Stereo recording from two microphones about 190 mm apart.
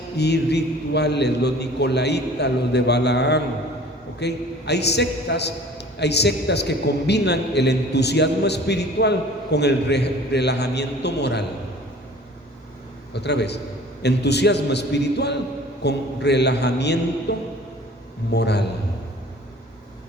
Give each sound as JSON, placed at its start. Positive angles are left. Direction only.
{"t": 0.2, "sound": "a man's voice", "side_deg": 60}
{"t": 13.1, "sound": "a man's voice", "side_deg": 60}
{"t": 17.3, "sound": "music", "side_deg": 65}
{"t": 18.3, "sound": "a man's voice", "side_deg": 60}